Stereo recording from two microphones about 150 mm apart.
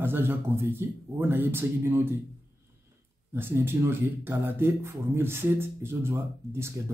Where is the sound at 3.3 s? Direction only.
15° right (ahead or behind).